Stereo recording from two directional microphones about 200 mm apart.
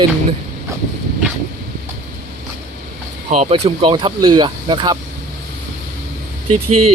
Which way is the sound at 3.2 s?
30° right (ahead or behind).